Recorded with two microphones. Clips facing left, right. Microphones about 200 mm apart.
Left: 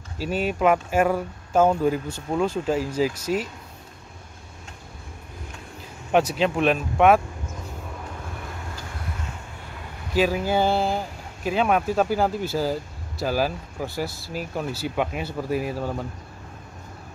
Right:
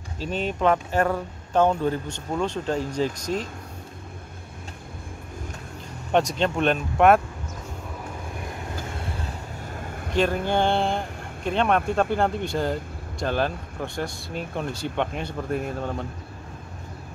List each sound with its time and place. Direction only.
0.2 s speech: 10° left (ahead or behind)
6.1 s speech: 5° left (ahead or behind)
9.1 s vehicle: 40° right (ahead or behind)
10.1 s speech: 5° left (ahead or behind)